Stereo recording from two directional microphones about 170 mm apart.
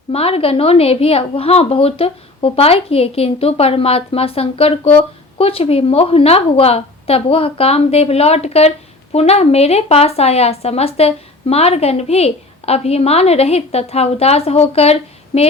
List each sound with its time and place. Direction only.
0.1 s speech: 35° left (ahead or behind)